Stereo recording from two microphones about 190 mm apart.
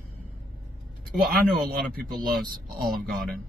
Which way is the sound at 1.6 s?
55° right (ahead or behind).